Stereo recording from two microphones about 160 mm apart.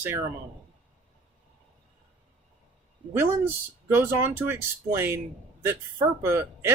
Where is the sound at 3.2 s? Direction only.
10° right (ahead or behind).